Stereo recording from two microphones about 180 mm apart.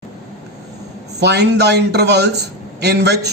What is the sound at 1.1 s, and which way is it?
A man's voice, 65° right (ahead or behind).